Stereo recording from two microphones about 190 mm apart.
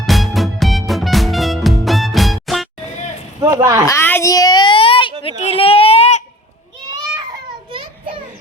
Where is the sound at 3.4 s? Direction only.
15° right (ahead or behind).